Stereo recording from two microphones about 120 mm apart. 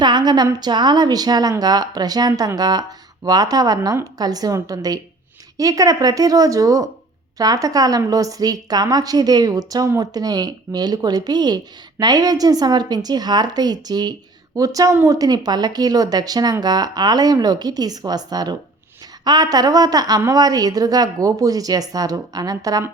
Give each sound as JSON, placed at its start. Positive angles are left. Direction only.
{"t": 0.0, "sound": "a woman's voice", "side_deg": -35}